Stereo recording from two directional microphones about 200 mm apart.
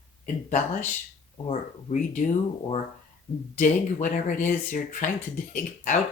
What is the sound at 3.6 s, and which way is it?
Speech, 40° left (ahead or behind).